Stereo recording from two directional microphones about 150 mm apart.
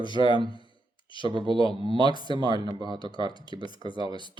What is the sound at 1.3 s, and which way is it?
Speech, 30° right (ahead or behind).